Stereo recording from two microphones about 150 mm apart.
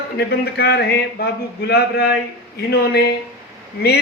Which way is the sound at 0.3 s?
90° left.